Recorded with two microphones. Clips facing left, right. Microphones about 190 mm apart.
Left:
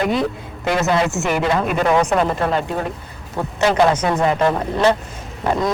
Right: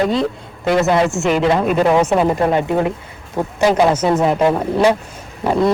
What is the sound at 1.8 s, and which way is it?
Speech, 5° right (ahead or behind).